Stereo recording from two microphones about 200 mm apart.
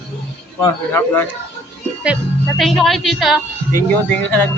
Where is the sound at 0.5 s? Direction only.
10° left (ahead or behind).